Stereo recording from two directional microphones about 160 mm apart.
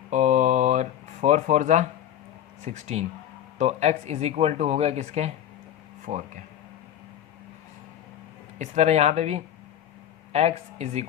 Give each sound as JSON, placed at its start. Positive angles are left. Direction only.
{"t": 0.1, "sound": "a sound", "side_deg": -50}
{"t": 2.6, "sound": "speech", "side_deg": -45}
{"t": 8.5, "sound": "speech", "side_deg": -45}